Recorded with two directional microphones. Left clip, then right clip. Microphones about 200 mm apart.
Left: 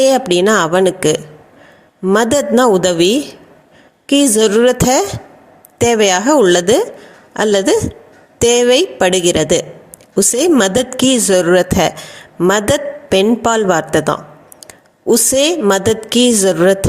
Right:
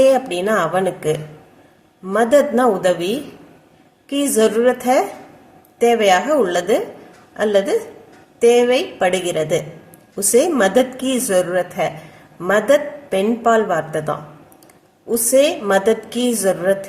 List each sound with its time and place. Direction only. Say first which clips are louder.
0.0 s a woman's voice: left 3 dB; 45° left (ahead or behind)